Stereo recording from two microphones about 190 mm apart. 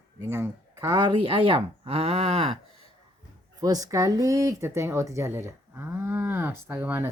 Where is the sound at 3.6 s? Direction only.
20° right (ahead or behind).